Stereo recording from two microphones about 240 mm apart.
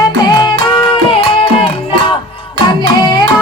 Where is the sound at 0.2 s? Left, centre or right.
Centre.